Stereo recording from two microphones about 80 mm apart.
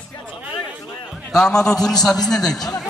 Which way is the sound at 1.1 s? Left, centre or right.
Centre.